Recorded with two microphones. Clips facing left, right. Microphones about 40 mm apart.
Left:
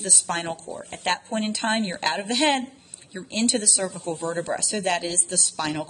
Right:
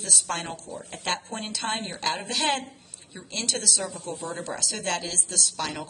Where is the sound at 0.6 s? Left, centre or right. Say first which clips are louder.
Left 3 dB; left.